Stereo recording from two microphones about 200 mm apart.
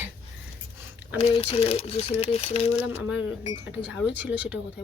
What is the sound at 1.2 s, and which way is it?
Speech, 30° left (ahead or behind).